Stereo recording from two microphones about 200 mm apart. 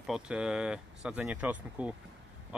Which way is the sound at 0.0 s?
5° right (ahead or behind).